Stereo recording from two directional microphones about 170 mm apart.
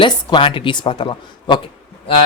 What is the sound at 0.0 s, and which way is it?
Speech, 30° left (ahead or behind).